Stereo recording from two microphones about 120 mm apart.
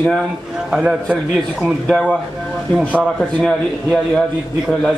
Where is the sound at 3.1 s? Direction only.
5° left (ahead or behind).